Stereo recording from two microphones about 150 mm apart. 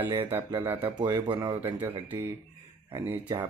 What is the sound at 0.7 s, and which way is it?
Speech, 40° right (ahead or behind).